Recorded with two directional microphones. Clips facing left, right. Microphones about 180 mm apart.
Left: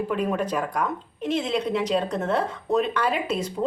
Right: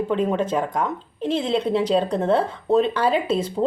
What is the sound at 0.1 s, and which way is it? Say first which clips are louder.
A woman's voice: right 5 dB; 25° right (ahead or behind).